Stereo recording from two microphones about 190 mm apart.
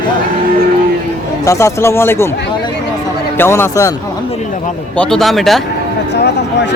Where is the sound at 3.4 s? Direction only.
10° left (ahead or behind).